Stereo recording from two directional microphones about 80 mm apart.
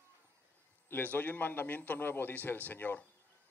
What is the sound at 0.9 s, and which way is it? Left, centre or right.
A man's voice, left.